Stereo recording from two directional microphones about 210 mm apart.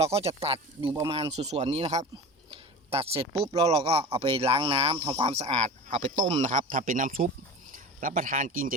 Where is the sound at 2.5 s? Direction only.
30° right (ahead or behind).